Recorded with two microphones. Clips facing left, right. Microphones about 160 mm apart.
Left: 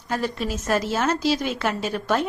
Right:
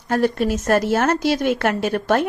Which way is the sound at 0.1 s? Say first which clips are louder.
Right 7 dB; 60° right (ahead or behind).